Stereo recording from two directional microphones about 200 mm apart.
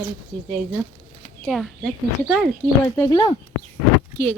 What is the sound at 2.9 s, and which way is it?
Speech, 15° left (ahead or behind).